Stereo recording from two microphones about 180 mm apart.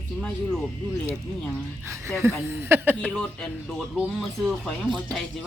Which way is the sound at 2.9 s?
5° left (ahead or behind).